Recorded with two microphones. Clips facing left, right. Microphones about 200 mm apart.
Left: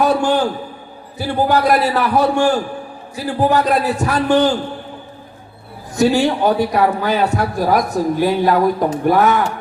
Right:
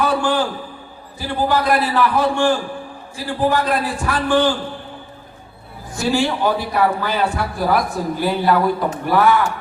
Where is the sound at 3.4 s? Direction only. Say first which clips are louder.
Left 3 dB; 40° left (ahead or behind).